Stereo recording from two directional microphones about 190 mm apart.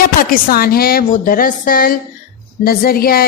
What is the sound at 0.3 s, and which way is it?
A woman's voice, 50° left (ahead or behind).